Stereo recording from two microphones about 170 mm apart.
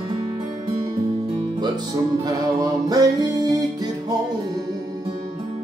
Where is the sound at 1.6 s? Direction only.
25° right (ahead or behind).